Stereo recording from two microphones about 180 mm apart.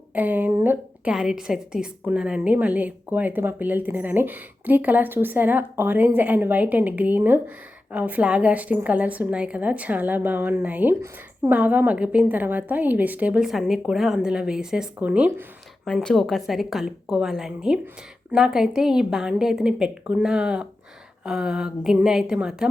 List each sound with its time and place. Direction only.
0.1 s a woman's voice: 10° right (ahead or behind)